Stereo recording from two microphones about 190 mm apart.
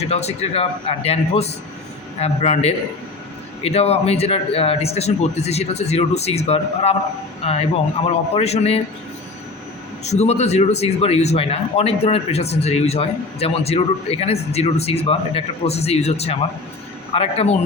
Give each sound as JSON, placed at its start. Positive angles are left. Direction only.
{"t": 0.0, "sound": "speech", "side_deg": 35}
{"t": 10.0, "sound": "speech", "side_deg": 35}